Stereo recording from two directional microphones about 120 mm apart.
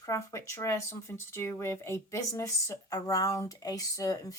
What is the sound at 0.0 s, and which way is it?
A woman's voice, 25° left (ahead or behind).